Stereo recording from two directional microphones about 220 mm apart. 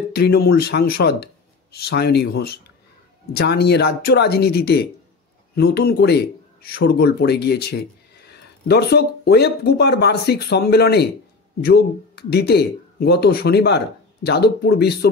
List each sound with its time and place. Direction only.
0.1 s speech: 45° left (ahead or behind)